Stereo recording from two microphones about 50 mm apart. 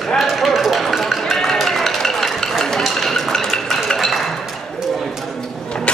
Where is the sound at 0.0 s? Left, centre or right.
Centre.